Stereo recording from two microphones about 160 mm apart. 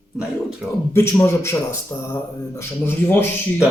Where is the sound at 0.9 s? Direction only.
15° left (ahead or behind).